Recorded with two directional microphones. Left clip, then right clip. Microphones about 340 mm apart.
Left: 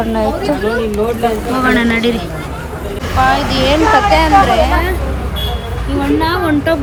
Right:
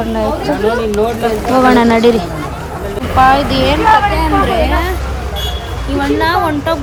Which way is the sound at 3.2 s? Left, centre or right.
Centre.